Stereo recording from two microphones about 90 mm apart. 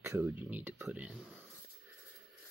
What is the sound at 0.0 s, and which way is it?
Speech, 25° right (ahead or behind).